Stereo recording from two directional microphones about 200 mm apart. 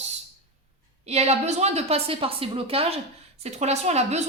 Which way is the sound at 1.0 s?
30° right (ahead or behind).